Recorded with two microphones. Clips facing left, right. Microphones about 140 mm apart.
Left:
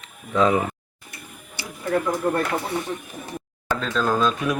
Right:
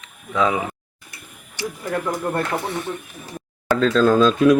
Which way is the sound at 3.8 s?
90° right.